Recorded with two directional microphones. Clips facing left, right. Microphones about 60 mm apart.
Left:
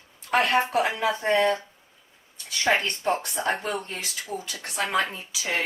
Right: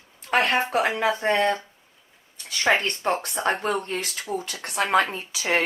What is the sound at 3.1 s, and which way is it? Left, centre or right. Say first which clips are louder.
Speech: right 2 dB; right.